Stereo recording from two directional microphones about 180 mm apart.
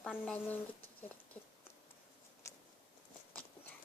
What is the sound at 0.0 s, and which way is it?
Speech, 5° left (ahead or behind).